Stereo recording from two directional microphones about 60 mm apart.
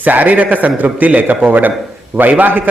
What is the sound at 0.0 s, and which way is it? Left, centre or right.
A man's voice, right.